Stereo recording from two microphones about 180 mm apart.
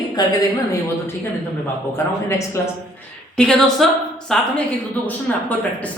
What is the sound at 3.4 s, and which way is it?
Speech, 5° left (ahead or behind).